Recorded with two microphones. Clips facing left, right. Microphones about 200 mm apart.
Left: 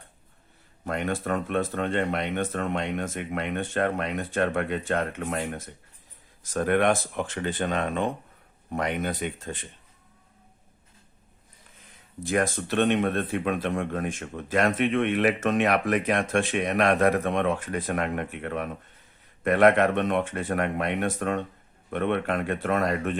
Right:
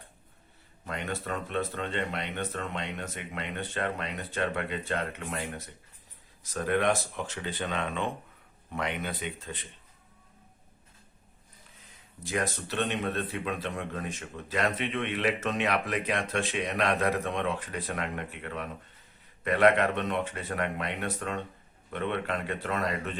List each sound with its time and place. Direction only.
0.9 s speech: 50° left (ahead or behind)
12.2 s speech: 50° left (ahead or behind)